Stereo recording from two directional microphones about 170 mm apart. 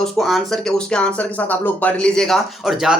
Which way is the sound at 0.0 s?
Centre (ahead or behind).